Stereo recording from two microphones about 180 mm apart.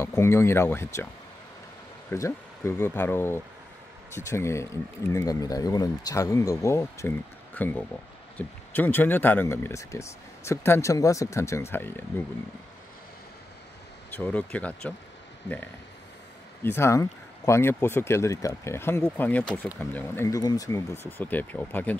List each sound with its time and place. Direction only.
0.0 s speech: 15° left (ahead or behind)
2.0 s speech: 15° left (ahead or behind)
14.1 s speech: 10° left (ahead or behind)
16.6 s speech: 15° left (ahead or behind)